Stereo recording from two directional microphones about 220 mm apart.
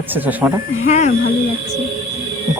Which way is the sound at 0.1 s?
10° right (ahead or behind).